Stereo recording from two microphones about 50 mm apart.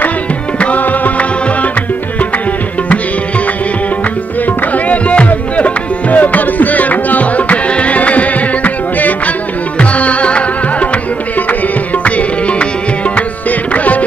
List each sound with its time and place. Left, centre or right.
0.6 s music: left
4.5 s music: left
12.0 s music: left